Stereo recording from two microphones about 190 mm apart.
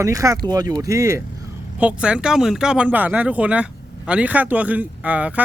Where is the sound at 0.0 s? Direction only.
15° right (ahead or behind).